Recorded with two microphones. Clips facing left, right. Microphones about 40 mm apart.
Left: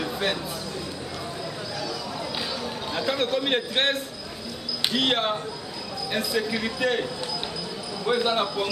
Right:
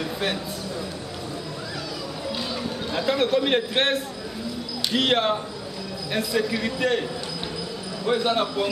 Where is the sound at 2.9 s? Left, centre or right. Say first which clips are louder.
Right 4 dB; centre.